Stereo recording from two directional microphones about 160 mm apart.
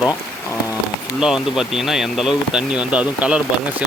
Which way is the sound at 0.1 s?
20° left (ahead or behind).